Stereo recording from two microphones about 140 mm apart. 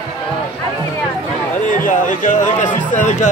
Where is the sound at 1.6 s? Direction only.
70° left (ahead or behind).